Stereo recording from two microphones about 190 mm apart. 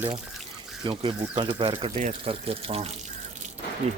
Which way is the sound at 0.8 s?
25° right (ahead or behind).